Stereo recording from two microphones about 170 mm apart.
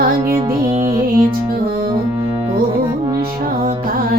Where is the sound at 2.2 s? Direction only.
20° right (ahead or behind).